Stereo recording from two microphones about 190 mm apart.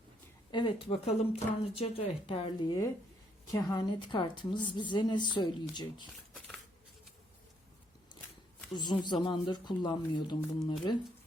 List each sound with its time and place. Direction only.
0.5 s a woman's voice: 25° left (ahead or behind)
8.7 s a woman's voice: 25° left (ahead or behind)